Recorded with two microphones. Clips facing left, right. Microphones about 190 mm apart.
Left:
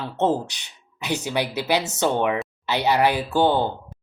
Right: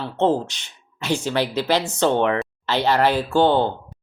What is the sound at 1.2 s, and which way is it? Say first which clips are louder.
Speech: right 2 dB; 15° left (ahead or behind).